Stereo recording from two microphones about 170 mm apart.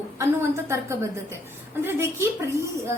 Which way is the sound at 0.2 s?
15° right (ahead or behind).